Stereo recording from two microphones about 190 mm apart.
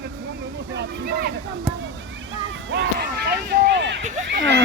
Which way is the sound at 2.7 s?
65° right (ahead or behind).